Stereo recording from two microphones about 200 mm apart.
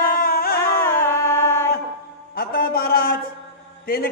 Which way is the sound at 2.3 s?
50° left (ahead or behind).